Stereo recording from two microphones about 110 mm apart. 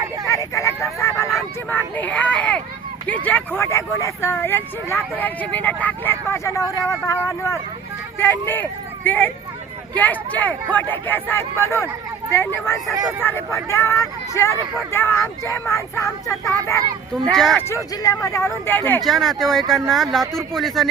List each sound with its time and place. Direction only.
0.3 s a sound: 25° left (ahead or behind)
1.7 s a sound: 15° left (ahead or behind)
3.1 s speech: 15° left (ahead or behind)
10.0 s speech: 15° left (ahead or behind)
13.2 s speech: 25° left (ahead or behind)
17.2 s speech: 5° left (ahead or behind)
17.9 s speech: 30° left (ahead or behind)
19.0 s speech: centre (ahead or behind)